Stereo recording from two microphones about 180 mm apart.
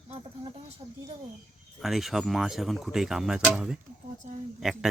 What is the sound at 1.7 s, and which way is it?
Speech, centre (ahead or behind).